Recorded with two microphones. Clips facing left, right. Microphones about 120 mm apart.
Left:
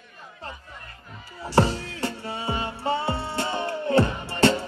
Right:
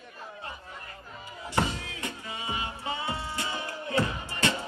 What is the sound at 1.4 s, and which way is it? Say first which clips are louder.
Music: left 8 dB; 35° left (ahead or behind).